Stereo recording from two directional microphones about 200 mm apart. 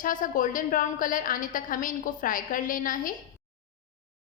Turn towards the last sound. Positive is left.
turn(degrees=40)  # may be behind; listen again after turning